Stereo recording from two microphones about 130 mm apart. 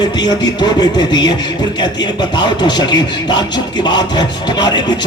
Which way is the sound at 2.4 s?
35° left (ahead or behind).